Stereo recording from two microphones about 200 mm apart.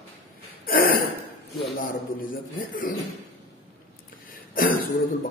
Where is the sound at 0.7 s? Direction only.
45° left (ahead or behind).